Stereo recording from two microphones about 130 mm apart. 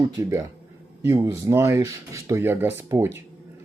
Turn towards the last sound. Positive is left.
turn(degrees=-20)  # may be behind; listen again after turning